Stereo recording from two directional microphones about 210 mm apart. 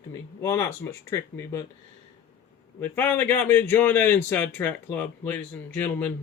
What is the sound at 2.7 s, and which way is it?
A man's voice, 10° left (ahead or behind).